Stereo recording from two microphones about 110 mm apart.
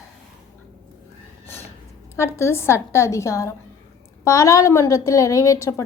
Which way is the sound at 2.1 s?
25° left (ahead or behind).